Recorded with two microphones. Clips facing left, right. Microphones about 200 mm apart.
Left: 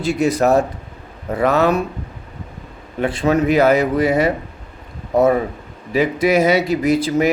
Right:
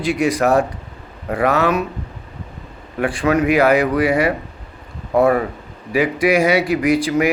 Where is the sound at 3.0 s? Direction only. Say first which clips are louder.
Even; 25° left (ahead or behind).